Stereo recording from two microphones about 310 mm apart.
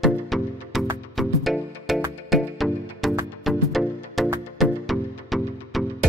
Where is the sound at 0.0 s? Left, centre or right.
Centre.